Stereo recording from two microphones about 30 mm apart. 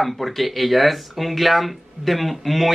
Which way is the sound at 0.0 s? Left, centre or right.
Centre.